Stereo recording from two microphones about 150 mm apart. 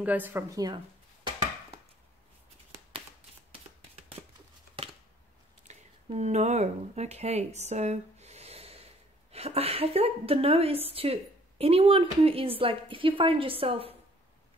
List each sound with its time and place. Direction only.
0.0 s speech: 10° right (ahead or behind)
5.7 s a woman's voice: 50° right (ahead or behind)